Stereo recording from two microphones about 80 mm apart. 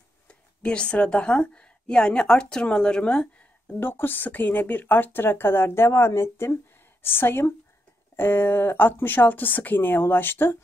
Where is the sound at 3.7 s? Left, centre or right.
Left.